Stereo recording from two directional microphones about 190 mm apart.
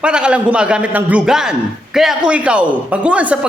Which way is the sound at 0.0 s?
5° right (ahead or behind).